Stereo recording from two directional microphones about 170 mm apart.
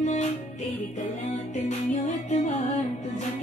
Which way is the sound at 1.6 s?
40° left (ahead or behind).